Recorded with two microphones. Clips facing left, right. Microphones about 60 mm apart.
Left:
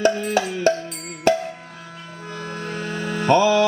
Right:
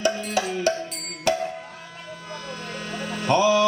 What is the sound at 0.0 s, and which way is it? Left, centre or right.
Music, left.